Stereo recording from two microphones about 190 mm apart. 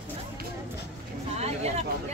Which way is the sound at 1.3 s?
35° right (ahead or behind).